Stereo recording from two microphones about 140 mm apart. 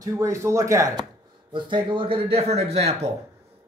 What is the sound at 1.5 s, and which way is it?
A man's voice, 35° right (ahead or behind).